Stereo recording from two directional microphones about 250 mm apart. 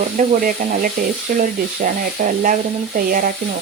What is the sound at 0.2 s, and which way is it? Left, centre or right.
Speech, right.